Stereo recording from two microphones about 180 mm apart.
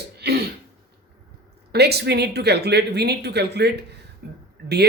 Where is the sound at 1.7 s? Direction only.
65° right (ahead or behind).